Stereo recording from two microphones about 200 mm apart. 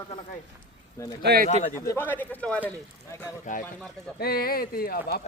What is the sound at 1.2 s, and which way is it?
Speech, 55° right (ahead or behind).